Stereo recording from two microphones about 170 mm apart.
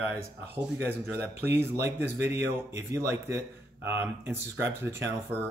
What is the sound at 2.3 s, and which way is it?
Speech, 85° right.